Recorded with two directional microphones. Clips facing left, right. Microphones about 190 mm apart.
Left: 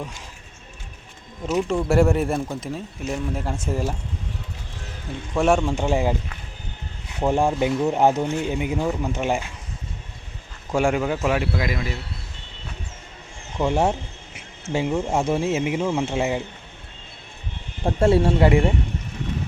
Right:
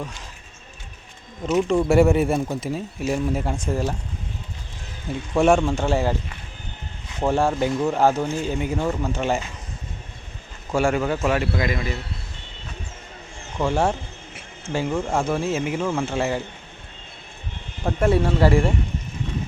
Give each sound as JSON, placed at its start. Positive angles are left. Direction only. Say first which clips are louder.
{"t": 1.5, "sound": "speech", "louder": "right 3 dB", "side_deg": 0}
{"t": 5.3, "sound": "speech", "louder": "right 2 dB", "side_deg": 0}
{"t": 5.6, "sound": "speech", "louder": "even", "side_deg": 15}
{"t": 7.3, "sound": "speech", "louder": "even", "side_deg": 15}
{"t": 10.7, "sound": "speech", "louder": "even", "side_deg": 15}
{"t": 13.6, "sound": "speech", "louder": "left 1 dB", "side_deg": 20}
{"t": 17.8, "sound": "speech", "louder": "left 2 dB", "side_deg": 25}